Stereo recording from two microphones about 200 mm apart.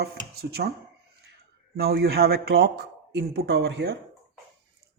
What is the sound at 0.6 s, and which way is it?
Speech, 50° right (ahead or behind).